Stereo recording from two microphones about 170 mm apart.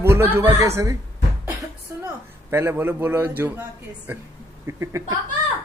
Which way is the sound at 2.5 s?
15° right (ahead or behind).